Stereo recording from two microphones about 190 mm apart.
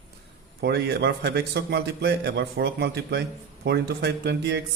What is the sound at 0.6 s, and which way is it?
A man's voice, 60° right (ahead or behind).